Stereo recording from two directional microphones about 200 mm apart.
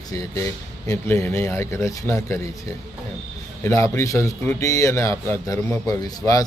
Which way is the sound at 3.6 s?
15° left (ahead or behind).